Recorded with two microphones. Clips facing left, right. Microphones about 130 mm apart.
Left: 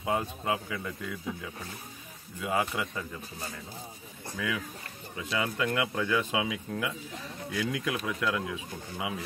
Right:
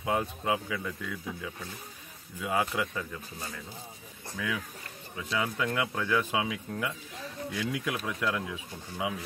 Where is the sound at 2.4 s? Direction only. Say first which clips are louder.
Even; 10° left (ahead or behind).